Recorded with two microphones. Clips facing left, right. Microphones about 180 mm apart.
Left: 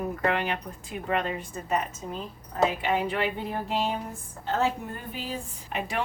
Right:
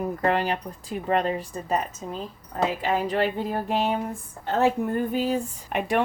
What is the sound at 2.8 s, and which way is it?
A woman's voice, 40° right (ahead or behind).